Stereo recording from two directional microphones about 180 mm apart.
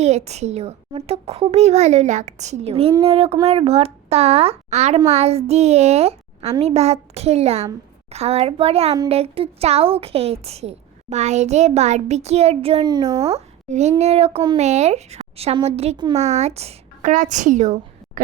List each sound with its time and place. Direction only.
0.0 s speech: 35° right (ahead or behind); by 13.3 s 20° right (ahead or behind)
13.3 s a woman's voice: 40° right (ahead or behind)
14.3 s speech: 25° right (ahead or behind)
14.6 s speech: 40° right (ahead or behind); by 16.3 s 20° right (ahead or behind)
16.3 s a woman's voice: 35° right (ahead or behind)